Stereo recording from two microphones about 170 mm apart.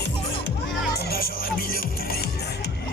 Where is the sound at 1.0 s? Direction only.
65° left (ahead or behind).